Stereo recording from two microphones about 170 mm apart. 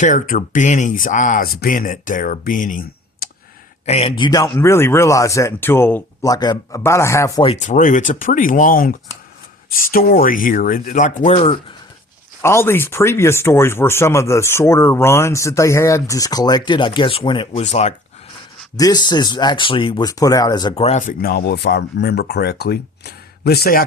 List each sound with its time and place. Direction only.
0.0 s speech: 50° left (ahead or behind)
3.8 s speech: 35° left (ahead or behind)
4.2 s speech: 20° left (ahead or behind)
7.6 s speech: 50° left (ahead or behind)
12.4 s speech: 15° left (ahead or behind)
17.6 s speech: 40° left (ahead or behind)
18.8 s speech: 25° left (ahead or behind)
20.7 s speech: 40° left (ahead or behind); by 23.8 s 65° left (ahead or behind)